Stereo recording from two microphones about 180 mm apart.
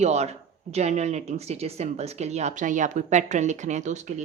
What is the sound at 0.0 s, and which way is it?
Speech, 35° right (ahead or behind).